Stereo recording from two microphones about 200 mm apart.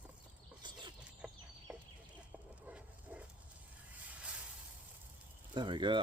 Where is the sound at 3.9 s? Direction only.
5° right (ahead or behind).